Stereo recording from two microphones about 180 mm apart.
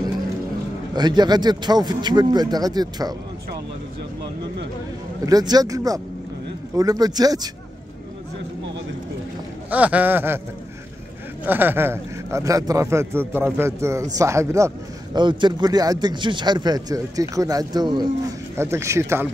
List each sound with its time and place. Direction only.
0.9 s speech: 25° right (ahead or behind)
5.2 s speech: 20° right (ahead or behind)
9.7 s a man's voice: 10° right (ahead or behind)
11.4 s a man's voice: 10° right (ahead or behind)